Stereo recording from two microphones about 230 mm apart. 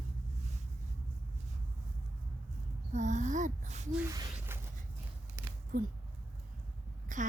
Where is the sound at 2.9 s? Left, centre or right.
Right.